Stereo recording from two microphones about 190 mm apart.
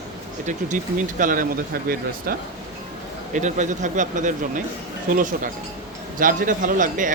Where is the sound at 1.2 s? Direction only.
45° right (ahead or behind).